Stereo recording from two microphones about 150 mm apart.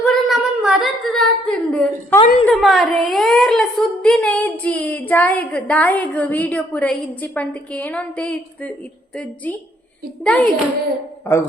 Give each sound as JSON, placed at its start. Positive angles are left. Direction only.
{"t": 0.0, "sound": "a sound", "side_deg": 0}
{"t": 2.5, "sound": "a woman's voice", "side_deg": 0}
{"t": 11.3, "sound": "a man's voice", "side_deg": 20}